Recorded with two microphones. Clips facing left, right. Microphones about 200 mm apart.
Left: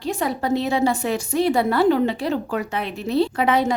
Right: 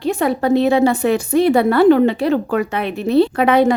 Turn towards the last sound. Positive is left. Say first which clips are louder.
# right 6 dB
turn(degrees=-60)  # may be behind; listen again after turning